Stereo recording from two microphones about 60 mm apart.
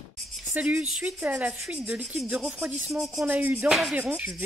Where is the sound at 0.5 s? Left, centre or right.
Right.